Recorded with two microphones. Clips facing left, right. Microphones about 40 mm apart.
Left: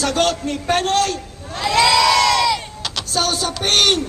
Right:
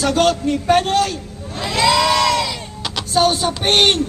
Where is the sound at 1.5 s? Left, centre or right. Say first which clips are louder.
Left 1 dB; left.